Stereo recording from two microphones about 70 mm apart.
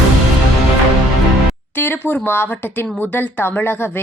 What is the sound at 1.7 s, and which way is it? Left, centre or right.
Speech, left.